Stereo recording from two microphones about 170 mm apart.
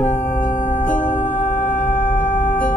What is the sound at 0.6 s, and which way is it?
Music, 10° left (ahead or behind).